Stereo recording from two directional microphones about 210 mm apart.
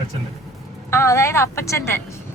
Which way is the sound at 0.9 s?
15° left (ahead or behind).